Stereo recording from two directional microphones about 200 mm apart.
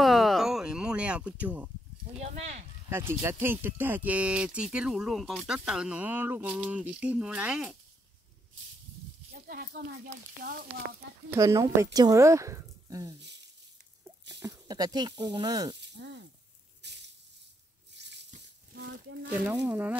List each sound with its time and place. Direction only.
0.0 s a sound: centre (ahead or behind)
2.2 s speech: 35° right (ahead or behind)
2.9 s speech: 10° right (ahead or behind)
9.5 s speech: 50° right (ahead or behind)
11.2 s speech: 15° right (ahead or behind)
13.2 s speech: 60° right (ahead or behind)
14.4 s speech: 20° right (ahead or behind)
15.8 s speech: 60° right (ahead or behind)
16.8 s a sound: 60° right (ahead or behind)
18.0 s a sound: 60° right (ahead or behind)
19.5 s speech: 10° right (ahead or behind)